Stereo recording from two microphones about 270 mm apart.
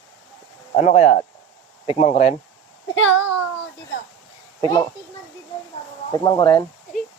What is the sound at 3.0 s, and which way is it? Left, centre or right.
Speech, left.